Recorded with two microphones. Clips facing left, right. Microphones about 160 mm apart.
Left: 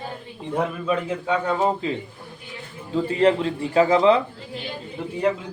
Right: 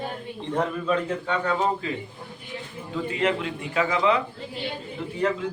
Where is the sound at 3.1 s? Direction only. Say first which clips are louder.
Left 7 dB; 35° left (ahead or behind).